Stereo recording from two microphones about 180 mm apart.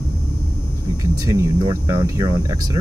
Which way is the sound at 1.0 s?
15° right (ahead or behind).